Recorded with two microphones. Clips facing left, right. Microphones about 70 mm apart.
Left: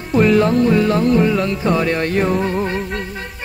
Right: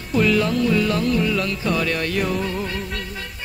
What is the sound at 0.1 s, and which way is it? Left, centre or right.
Music, left.